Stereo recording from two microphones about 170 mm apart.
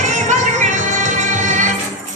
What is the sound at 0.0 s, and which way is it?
Music, 45° right (ahead or behind).